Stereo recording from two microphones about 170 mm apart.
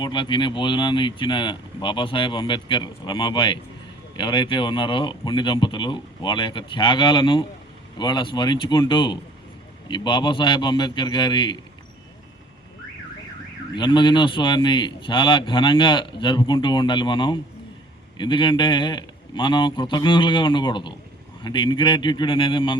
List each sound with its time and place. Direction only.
0.0 s a man's voice: 30° left (ahead or behind)
13.7 s a man's voice: 25° left (ahead or behind)